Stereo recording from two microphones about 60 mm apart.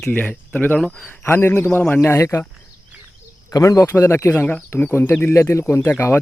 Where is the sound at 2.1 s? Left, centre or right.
Left.